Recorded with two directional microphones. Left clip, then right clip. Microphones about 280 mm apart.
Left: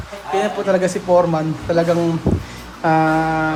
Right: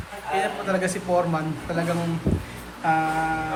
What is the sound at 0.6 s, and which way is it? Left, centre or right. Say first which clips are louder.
Speech: left 8 dB; centre.